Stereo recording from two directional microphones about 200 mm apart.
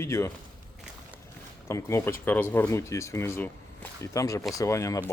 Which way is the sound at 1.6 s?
15° left (ahead or behind).